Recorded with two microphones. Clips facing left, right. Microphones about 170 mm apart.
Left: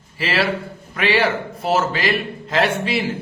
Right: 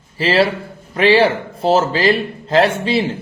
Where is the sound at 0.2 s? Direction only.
30° right (ahead or behind).